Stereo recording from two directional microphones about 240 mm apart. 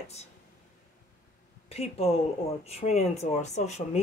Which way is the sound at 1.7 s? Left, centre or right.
Left.